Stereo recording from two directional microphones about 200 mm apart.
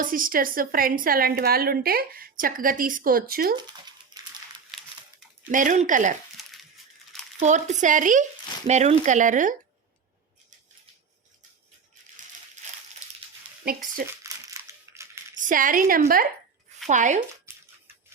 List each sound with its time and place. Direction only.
0.0 s a woman's voice: 45° right (ahead or behind)
3.5 s a sound: 20° right (ahead or behind)
5.5 s speech: 40° right (ahead or behind)
6.4 s a sound: centre (ahead or behind)
7.3 s speech: 35° right (ahead or behind)
12.6 s crushing: 35° right (ahead or behind)
14.0 s a woman's voice: 45° right (ahead or behind)
14.7 s a sound: 15° right (ahead or behind)
15.4 s a woman's voice: 40° right (ahead or behind)